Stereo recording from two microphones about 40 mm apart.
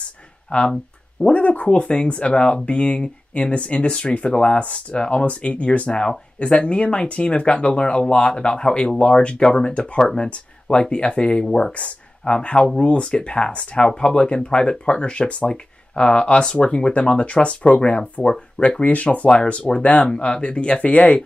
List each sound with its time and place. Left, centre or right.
0.5 s speech: left
1.7 s speech: left